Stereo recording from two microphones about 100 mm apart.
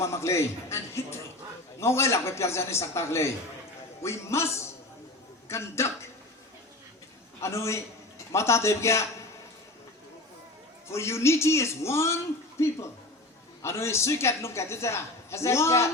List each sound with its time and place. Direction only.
0.0 s a man's voice: 30° left (ahead or behind)
7.4 s a woman's voice: 30° left (ahead or behind)
10.8 s a woman's voice: 25° left (ahead or behind)